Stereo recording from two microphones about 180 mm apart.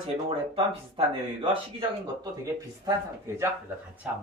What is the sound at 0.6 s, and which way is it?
Speech, 30° right (ahead or behind).